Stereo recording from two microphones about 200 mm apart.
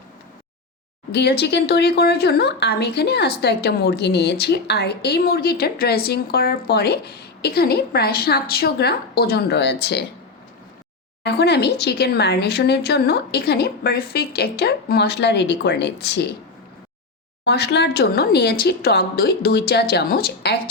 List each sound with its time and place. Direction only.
1.1 s speech: 55° left (ahead or behind)
11.2 s speech: 55° left (ahead or behind)
17.4 s speech: 55° left (ahead or behind)